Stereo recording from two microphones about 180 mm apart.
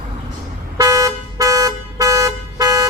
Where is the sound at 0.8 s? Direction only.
20° right (ahead or behind).